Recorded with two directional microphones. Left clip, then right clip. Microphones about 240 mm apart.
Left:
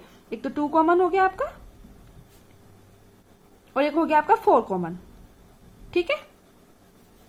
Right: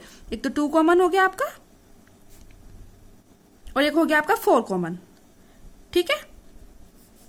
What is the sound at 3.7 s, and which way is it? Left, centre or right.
A woman's voice, right.